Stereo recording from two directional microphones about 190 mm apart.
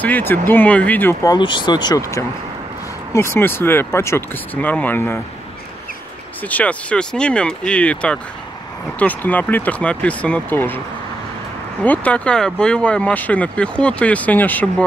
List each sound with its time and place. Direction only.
0.0 s speech: 10° left (ahead or behind)
6.5 s speech: 5° left (ahead or behind)
11.8 s speech: 10° left (ahead or behind)